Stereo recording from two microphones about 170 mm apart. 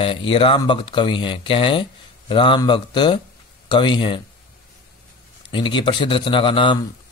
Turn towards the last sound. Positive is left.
turn(degrees=30)  # may be behind; listen again after turning